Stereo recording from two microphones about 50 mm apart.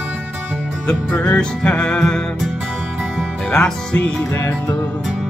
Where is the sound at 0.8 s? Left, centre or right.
Centre.